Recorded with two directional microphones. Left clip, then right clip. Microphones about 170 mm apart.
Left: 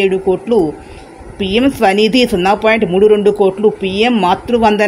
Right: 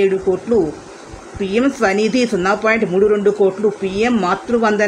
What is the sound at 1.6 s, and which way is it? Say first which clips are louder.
Speech: left 4 dB; 45° left (ahead or behind).